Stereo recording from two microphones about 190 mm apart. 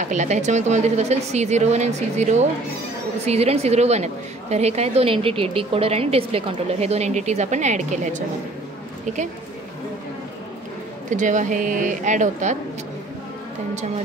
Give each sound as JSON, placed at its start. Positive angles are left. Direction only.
{"t": 0.0, "sound": "a woman's voice", "side_deg": -40}
{"t": 11.1, "sound": "a woman's voice", "side_deg": -40}